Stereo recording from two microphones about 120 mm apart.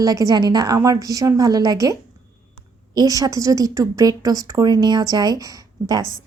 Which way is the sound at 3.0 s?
30° right (ahead or behind).